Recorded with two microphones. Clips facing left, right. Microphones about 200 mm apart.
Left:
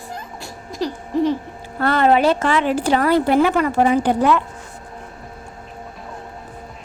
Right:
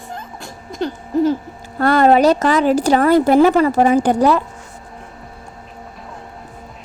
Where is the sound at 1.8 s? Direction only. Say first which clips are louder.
Right 4 dB; 40° right (ahead or behind).